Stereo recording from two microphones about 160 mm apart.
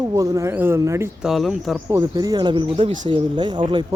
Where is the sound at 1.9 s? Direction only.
20° right (ahead or behind).